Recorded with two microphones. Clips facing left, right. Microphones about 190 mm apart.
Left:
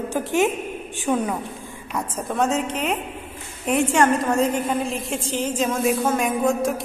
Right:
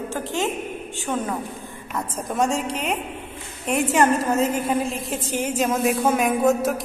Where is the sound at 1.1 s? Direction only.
Centre (ahead or behind).